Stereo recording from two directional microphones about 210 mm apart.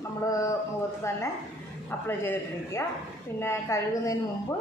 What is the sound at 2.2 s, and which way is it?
A woman's voice, 10° left (ahead or behind).